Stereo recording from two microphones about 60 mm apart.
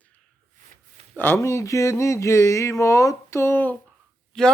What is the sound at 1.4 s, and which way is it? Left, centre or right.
Speech, left.